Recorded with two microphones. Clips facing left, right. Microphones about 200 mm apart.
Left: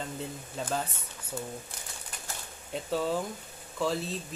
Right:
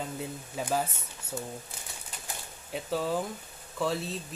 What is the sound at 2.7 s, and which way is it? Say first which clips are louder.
Speech: even; centre (ahead or behind).